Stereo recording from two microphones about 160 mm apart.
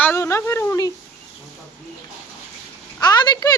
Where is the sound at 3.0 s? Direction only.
25° left (ahead or behind).